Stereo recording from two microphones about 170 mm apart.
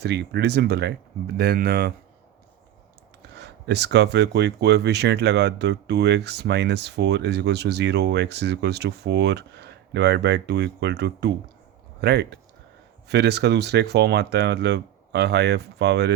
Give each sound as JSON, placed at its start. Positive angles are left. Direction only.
{"t": 0.0, "sound": "speech", "side_deg": -80}
{"t": 1.4, "sound": "speech", "side_deg": -65}
{"t": 3.3, "sound": "speech", "side_deg": -80}